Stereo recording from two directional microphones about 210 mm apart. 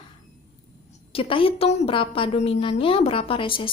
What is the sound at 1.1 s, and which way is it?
A woman's voice, 25° left (ahead or behind).